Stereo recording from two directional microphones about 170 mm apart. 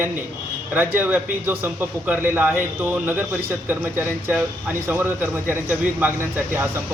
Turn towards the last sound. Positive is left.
turn(degrees=-10)  # may be behind; listen again after turning